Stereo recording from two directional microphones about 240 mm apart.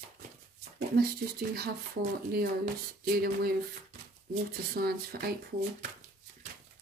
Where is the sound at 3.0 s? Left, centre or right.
Right.